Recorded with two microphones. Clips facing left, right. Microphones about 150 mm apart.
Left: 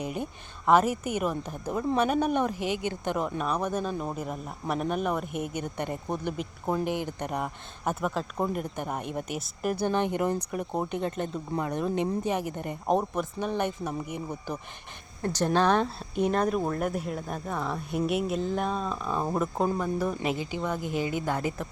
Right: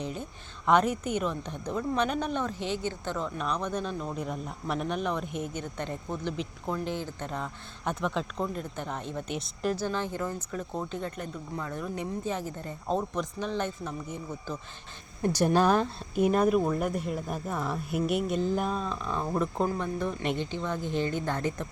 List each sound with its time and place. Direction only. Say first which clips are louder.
0.0 s a woman's voice: left 3 dB; 10° left (ahead or behind)
15.2 s a woman's voice: right 1 dB; 10° right (ahead or behind); by 21.7 s 10° left (ahead or behind)